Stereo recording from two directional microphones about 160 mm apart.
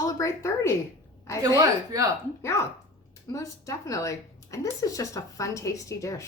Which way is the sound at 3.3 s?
20° left (ahead or behind).